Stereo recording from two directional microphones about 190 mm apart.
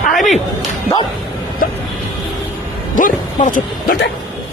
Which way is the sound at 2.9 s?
45° left (ahead or behind).